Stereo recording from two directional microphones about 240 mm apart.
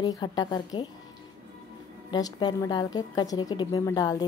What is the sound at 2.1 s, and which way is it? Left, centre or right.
A woman's voice, centre.